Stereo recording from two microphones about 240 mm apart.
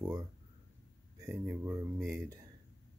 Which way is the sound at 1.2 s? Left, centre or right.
Centre.